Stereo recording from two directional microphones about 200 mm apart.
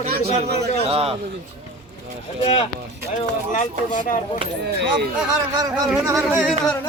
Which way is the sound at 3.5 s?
40° left (ahead or behind).